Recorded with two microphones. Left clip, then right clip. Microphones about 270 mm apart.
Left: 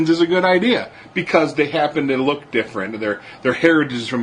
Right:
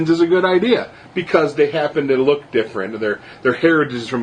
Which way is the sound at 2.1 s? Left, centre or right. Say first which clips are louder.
Right 4 dB; left.